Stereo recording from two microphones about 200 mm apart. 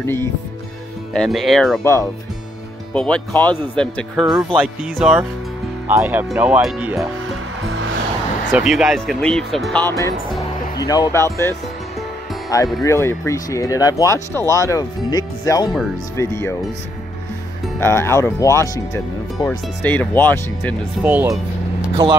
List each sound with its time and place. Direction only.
0.0 s speech: 10° left (ahead or behind)
1.8 s speech: 15° left (ahead or behind); by 7.1 s 5° right (ahead or behind)
8.5 s speech: 5° right (ahead or behind)
9.8 s speech: 15° left (ahead or behind)
17.7 s speech: 10° left (ahead or behind)
19.8 s speech: 10° left (ahead or behind)
21.0 s speech: 10° right (ahead or behind)